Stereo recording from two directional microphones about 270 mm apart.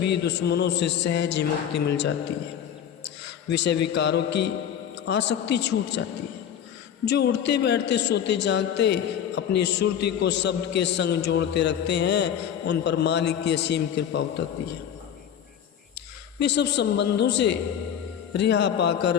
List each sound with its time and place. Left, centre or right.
0.0 s a man's voice: left
3.5 s a man's voice: left
7.0 s a man's voice: left
16.4 s a man's voice: left